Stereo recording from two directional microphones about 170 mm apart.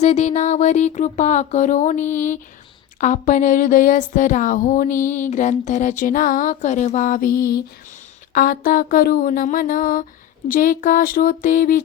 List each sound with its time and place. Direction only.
0.0 s speech: 40° left (ahead or behind); by 7.5 s 55° left (ahead or behind)
8.3 s a sound: 55° left (ahead or behind)
10.5 s speech: 50° left (ahead or behind)